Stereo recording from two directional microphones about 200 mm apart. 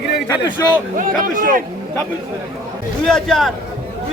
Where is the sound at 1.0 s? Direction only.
40° right (ahead or behind).